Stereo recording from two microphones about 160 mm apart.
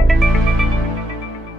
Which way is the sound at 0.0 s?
Centre (ahead or behind).